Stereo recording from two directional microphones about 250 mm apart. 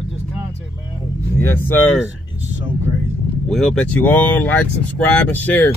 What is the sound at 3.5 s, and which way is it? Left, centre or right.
Speech, centre.